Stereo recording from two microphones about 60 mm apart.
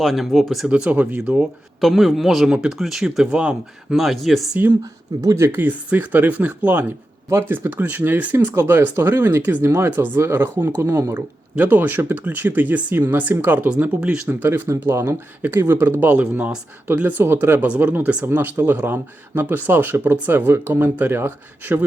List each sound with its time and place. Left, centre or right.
0.0 s speech: centre
0.7 s speech: right
1.8 s speech: centre
3.3 s speech: centre
3.9 s speech: centre
5.5 s speech: right
9.4 s speech: right
9.6 s speech: right
10.2 s speech: right
11.5 s speech: right
14.4 s speech: right
15.4 s speech: right
15.6 s speech: right
16.0 s speech: right